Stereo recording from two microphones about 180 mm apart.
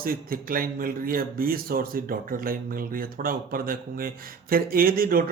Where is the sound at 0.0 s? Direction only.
55° right (ahead or behind).